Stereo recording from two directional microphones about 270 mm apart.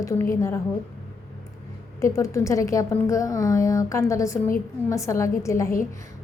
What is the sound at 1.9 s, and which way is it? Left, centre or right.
A woman's voice, centre.